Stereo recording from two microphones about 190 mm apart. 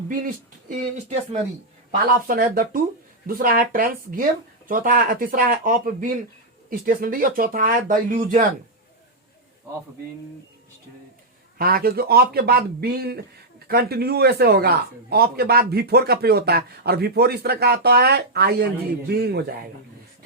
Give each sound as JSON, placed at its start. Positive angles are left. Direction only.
{"t": 0.1, "sound": "speech", "side_deg": -45}
{"t": 2.2, "sound": "speech", "side_deg": -50}
{"t": 11.5, "sound": "speech", "side_deg": -50}